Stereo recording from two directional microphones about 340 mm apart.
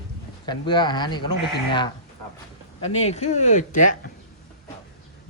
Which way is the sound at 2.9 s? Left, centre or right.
Centre.